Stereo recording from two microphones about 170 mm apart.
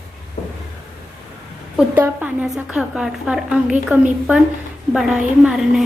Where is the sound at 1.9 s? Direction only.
10° right (ahead or behind).